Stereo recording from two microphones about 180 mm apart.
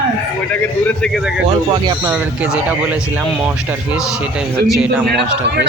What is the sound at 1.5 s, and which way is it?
Speech, 25° right (ahead or behind).